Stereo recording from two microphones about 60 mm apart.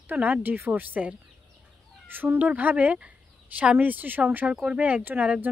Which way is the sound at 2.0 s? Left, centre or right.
Right.